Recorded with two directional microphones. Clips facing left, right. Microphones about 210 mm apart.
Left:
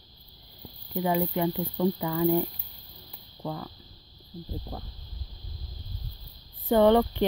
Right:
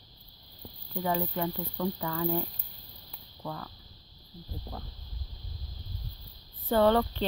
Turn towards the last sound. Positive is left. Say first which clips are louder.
# left 4 dB
turn(degrees=15)  # may be behind; listen again after turning